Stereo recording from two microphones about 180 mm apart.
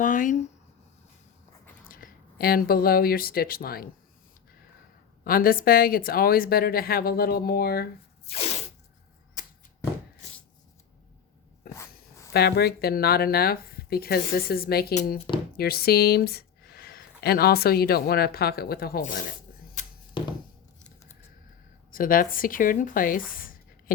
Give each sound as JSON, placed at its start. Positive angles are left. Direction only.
{"t": 0.0, "sound": "speech", "side_deg": 45}
{"t": 1.9, "sound": "speech", "side_deg": 50}
{"t": 5.2, "sound": "speech", "side_deg": 55}
{"t": 11.7, "sound": "dog", "side_deg": 15}
{"t": 12.3, "sound": "speech", "side_deg": 65}
{"t": 19.8, "sound": "a sound", "side_deg": 45}
{"t": 20.2, "sound": "a sound", "side_deg": 25}
{"t": 21.9, "sound": "speech", "side_deg": 50}